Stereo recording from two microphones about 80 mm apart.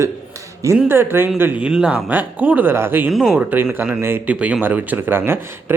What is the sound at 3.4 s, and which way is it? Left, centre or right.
Speech, right.